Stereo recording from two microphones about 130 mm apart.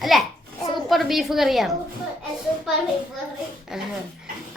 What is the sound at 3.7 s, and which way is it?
Speech, 5° right (ahead or behind).